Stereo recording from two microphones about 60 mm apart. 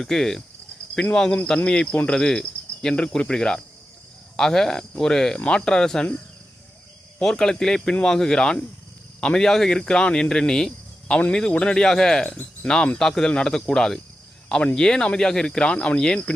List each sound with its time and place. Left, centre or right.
0.0 s speech: centre
7.2 s speech: centre